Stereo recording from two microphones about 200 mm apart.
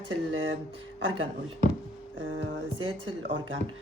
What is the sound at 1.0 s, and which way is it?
Speech, 75° right (ahead or behind).